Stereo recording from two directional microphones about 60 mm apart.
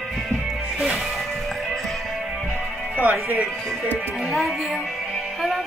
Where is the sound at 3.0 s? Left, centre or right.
Right.